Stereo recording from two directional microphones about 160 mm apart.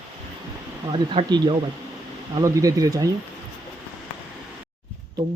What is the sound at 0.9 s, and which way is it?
Speech, 30° right (ahead or behind).